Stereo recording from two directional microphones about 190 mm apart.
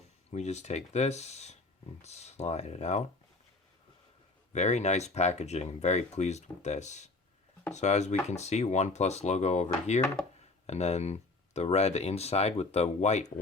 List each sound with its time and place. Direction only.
0.3 s speech: 35° left (ahead or behind)
4.5 s speech: 35° left (ahead or behind)